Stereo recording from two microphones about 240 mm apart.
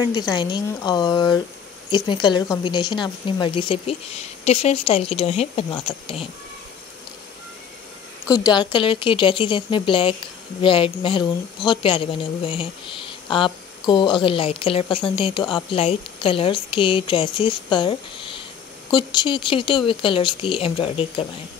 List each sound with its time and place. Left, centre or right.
0.0 s speech: centre
8.3 s speech: centre